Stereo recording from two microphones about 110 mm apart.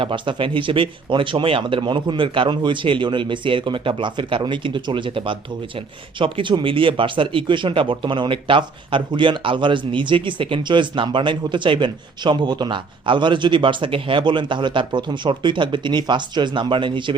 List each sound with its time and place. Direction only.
0.0 s speech: 50° right (ahead or behind)